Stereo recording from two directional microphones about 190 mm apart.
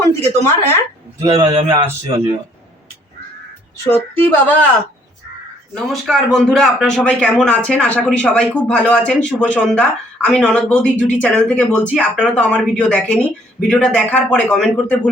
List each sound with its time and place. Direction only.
0.0 s speech: 15° left (ahead or behind)
1.3 s a man's voice: 20° right (ahead or behind)
3.8 s speech: 10° left (ahead or behind)
5.7 s a man's voice: centre (ahead or behind)